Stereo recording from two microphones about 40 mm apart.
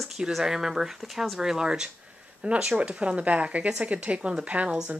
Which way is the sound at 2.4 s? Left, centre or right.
Right.